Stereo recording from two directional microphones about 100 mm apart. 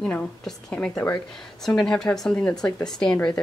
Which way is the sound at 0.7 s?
10° left (ahead or behind).